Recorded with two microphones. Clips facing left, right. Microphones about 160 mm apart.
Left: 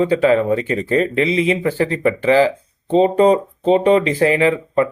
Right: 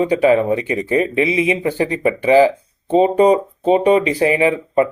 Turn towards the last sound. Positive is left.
turn(degrees=-20)  # may be behind; listen again after turning